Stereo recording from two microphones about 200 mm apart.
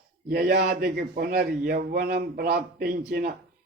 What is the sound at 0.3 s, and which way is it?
A man's voice, 50° right (ahead or behind).